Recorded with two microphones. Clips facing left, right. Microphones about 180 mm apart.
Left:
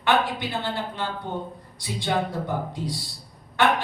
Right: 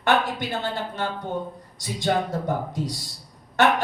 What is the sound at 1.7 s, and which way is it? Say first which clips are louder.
Speech: right 2 dB; 45° right (ahead or behind).